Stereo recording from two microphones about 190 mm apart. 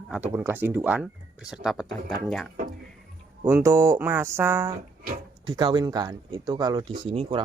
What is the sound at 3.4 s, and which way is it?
Speech, 15° right (ahead or behind).